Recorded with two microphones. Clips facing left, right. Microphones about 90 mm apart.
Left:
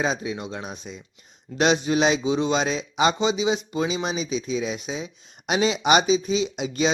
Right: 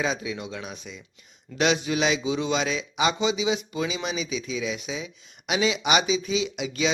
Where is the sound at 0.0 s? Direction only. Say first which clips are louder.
Left 2 dB; 35° left (ahead or behind).